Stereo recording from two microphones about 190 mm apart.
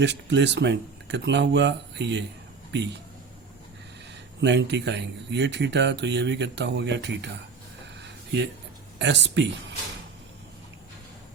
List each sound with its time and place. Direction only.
0.0 s speech: 65° right (ahead or behind)
4.4 s speech: 65° right (ahead or behind)
8.0 s a sound: 65° right (ahead or behind)
9.0 s speech: 70° right (ahead or behind)